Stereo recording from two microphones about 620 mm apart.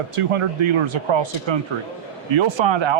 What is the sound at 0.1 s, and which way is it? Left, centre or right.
Speech, right.